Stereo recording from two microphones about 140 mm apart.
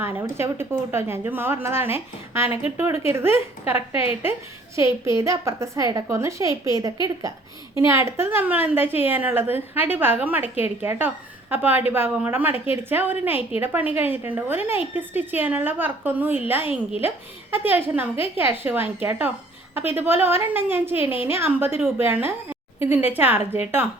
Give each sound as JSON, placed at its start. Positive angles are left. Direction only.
{"t": 0.0, "sound": "a woman's voice", "side_deg": -15}